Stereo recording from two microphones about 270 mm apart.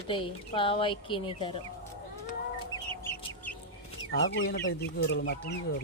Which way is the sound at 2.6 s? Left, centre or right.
Centre.